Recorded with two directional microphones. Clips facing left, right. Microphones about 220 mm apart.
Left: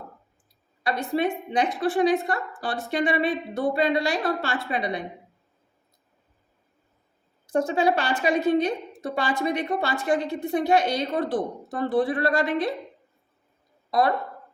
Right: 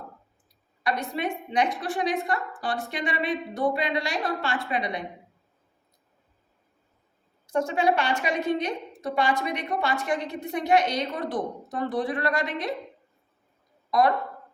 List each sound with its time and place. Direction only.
0.9 s a woman's voice: 30° left (ahead or behind)
7.5 s a woman's voice: 30° left (ahead or behind)